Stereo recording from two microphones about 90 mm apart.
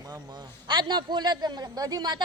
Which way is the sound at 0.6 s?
55° right (ahead or behind).